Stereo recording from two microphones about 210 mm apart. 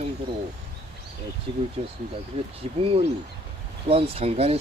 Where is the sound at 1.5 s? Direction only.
30° right (ahead or behind).